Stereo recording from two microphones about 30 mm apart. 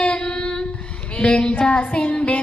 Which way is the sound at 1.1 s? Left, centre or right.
Left.